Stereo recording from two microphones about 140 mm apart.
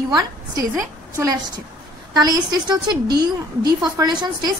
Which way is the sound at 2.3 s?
30° right (ahead or behind).